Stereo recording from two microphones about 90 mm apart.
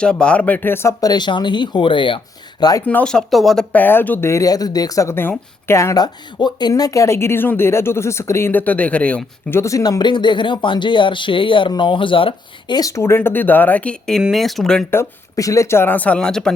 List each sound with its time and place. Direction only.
0.0 s speech: 10° left (ahead or behind); by 0.9 s 25° left (ahead or behind)
1.0 s speech: 55° left (ahead or behind); by 2.6 s 70° left (ahead or behind)
2.8 s speech: 20° left (ahead or behind)
3.1 s speech: 5° left (ahead or behind)
3.7 s speech: 20° left (ahead or behind)
4.3 s speech: 40° left (ahead or behind)
5.0 s speech: 25° left (ahead or behind)
6.0 s speech: 50° left (ahead or behind); by 9.2 s 15° left (ahead or behind)
9.5 s speech: 30° left (ahead or behind)
10.0 s speech: 60° left (ahead or behind)
12.7 s speech: 40° left (ahead or behind); by 13.9 s 20° left (ahead or behind)
14.2 s speech: 5° right (ahead or behind)
15.4 s speech: 35° left (ahead or behind); by 16.5 s 10° left (ahead or behind)